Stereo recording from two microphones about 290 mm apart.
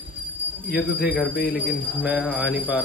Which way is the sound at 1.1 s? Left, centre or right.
Centre.